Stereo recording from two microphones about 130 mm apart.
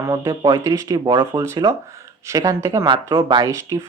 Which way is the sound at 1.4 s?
25° right (ahead or behind).